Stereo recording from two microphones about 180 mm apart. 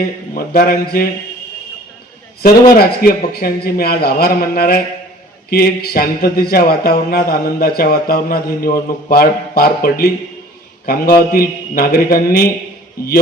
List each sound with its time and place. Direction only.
0.3 s speech: 55° left (ahead or behind)
2.7 s speech: 55° left (ahead or behind)